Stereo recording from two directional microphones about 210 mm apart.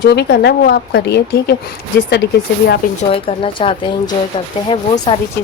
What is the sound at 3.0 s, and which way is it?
Speech, 25° left (ahead or behind).